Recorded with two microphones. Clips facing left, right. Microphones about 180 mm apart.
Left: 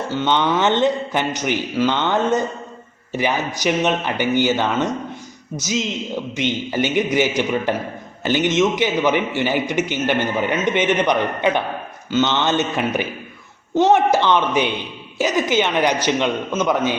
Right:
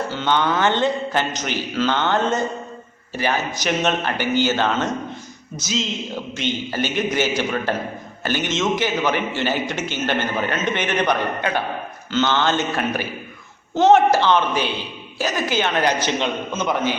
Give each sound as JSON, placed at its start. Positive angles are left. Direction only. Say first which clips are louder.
{"t": 0.1, "sound": "a man's voice", "louder": "left 4 dB", "side_deg": 20}